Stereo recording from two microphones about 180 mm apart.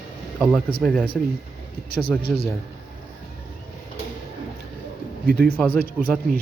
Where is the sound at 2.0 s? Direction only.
25° left (ahead or behind).